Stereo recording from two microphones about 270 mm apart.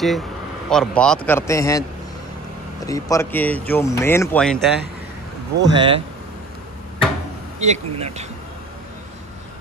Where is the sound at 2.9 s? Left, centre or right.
Centre.